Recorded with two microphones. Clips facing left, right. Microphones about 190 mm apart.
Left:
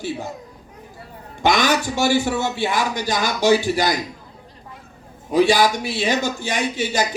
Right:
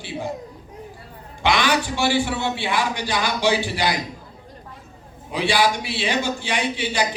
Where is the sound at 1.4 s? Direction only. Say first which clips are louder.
Left 2 dB; 45° left (ahead or behind).